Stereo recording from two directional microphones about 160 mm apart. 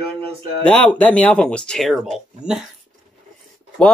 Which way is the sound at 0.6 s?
5° left (ahead or behind).